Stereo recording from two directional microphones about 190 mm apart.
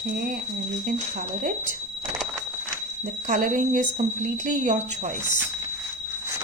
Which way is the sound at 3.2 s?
45° right (ahead or behind).